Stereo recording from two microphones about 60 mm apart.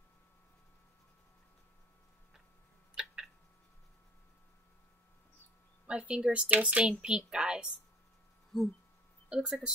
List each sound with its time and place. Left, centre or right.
2.9 s cat: centre
5.9 s a woman's voice: centre
8.5 s speech: centre
9.3 s a woman's voice: centre